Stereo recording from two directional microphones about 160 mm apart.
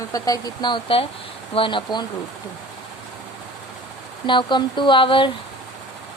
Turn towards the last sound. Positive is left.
turn(degrees=30)  # may be behind; listen again after turning